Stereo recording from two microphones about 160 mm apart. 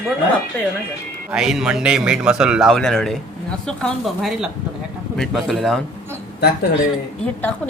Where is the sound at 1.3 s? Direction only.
5° right (ahead or behind).